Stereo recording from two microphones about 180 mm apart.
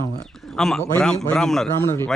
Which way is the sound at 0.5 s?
5° left (ahead or behind).